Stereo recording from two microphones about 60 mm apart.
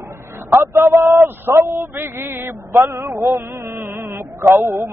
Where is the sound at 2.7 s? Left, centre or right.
Right.